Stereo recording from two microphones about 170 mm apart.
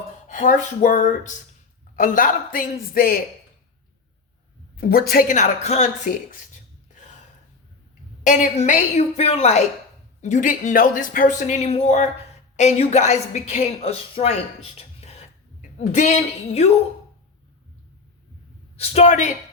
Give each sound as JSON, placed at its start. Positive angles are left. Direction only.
{"t": 0.3, "sound": "speech", "side_deg": 45}
{"t": 4.8, "sound": "a man's voice", "side_deg": 65}
{"t": 5.3, "sound": "speech", "side_deg": 40}
{"t": 8.2, "sound": "a woman's voice", "side_deg": 45}
{"t": 18.8, "sound": "speech", "side_deg": 40}